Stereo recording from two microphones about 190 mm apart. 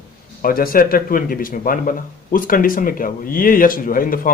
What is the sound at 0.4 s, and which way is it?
Speech, 50° left (ahead or behind).